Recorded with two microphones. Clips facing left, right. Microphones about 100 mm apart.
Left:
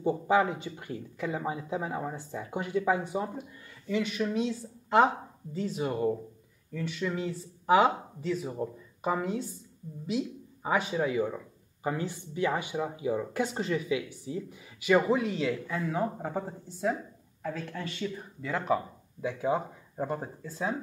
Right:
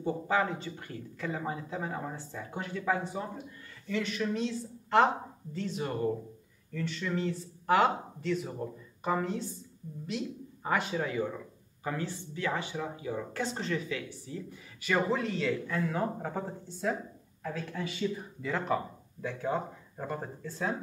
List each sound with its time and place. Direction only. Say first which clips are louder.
0.0 s speech: left 4 dB; 20° left (ahead or behind)